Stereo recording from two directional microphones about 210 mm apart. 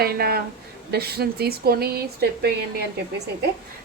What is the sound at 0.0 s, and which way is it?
A woman's voice, 45° right (ahead or behind).